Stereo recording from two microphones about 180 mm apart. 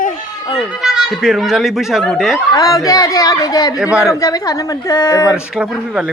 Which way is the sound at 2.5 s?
20° left (ahead or behind).